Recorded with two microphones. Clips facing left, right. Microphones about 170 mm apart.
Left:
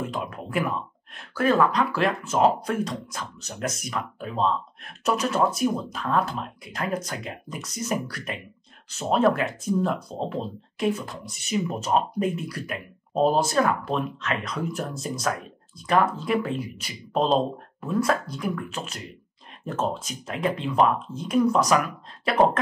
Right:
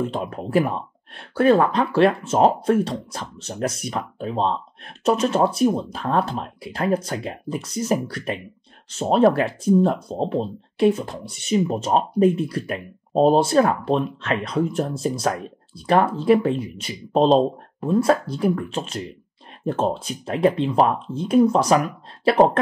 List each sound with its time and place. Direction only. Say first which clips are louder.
0.0 s speech: right 5 dB; 30° right (ahead or behind)